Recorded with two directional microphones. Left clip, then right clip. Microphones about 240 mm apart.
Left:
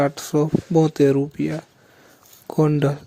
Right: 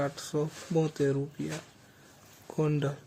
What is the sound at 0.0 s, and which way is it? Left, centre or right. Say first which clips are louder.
Speech: left 12 dB; left.